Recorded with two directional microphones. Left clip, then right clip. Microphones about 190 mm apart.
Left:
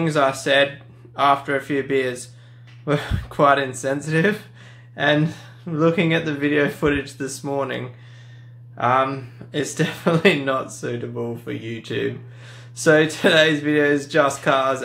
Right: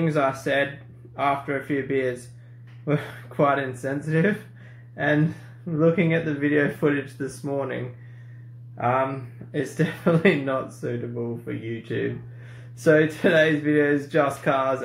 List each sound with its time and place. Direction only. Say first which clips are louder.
0.4 s speech: left 6 dB; 15° left (ahead or behind)